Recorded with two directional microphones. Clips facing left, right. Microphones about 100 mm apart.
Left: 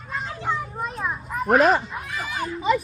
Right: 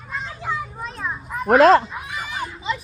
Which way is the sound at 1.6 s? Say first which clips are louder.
Right 6 dB; 90° right.